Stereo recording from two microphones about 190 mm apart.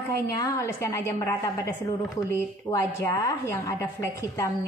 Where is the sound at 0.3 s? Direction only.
15° left (ahead or behind).